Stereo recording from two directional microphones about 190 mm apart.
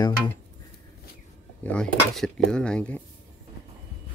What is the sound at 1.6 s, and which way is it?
Speech, 5° left (ahead or behind).